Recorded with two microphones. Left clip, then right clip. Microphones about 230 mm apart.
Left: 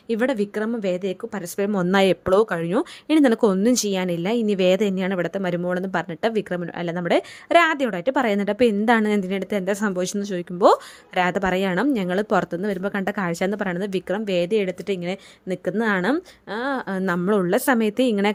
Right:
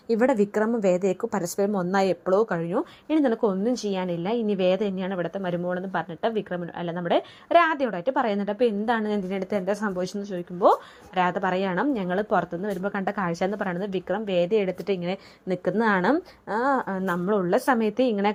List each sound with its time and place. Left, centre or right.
0.8 s a woman's voice: centre
1.5 s a woman's voice: left; by 16.2 s centre
16.9 s a woman's voice: left